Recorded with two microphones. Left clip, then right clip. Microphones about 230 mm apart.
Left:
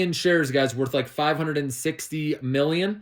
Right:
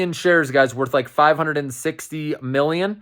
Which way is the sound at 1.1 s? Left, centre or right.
Right.